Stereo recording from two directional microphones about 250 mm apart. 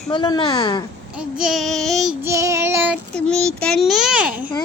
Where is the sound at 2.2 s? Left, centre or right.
Centre.